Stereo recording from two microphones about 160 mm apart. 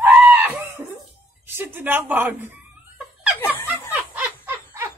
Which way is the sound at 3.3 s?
15° left (ahead or behind).